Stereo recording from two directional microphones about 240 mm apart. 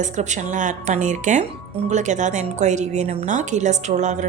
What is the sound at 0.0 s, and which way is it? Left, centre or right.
A woman's voice, right.